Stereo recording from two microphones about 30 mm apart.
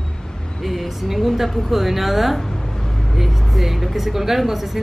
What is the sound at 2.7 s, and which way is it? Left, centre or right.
Vehicle, centre.